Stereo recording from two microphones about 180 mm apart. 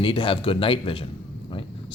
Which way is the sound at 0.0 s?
30° left (ahead or behind).